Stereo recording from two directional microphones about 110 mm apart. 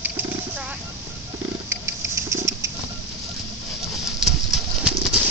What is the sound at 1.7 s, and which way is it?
Patter, 25° right (ahead or behind).